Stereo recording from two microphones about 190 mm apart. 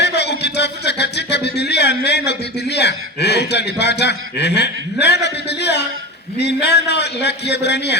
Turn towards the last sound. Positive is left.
turn(degrees=65)  # may be behind; listen again after turning